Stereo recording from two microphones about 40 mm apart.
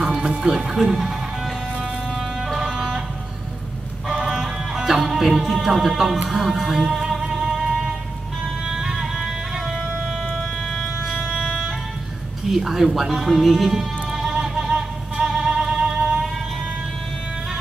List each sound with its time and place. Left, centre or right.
0.0 s music: centre
0.5 s speech: centre
2.6 s vehicle: centre
4.2 s music: centre
12.4 s music: centre; by 16.2 s right